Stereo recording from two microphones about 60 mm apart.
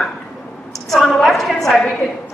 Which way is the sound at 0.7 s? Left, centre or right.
Centre.